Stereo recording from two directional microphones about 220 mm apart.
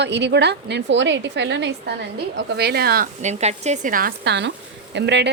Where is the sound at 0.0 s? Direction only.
50° right (ahead or behind).